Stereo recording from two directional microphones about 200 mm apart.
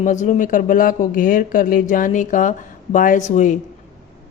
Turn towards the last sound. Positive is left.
turn(degrees=40)  # may be behind; listen again after turning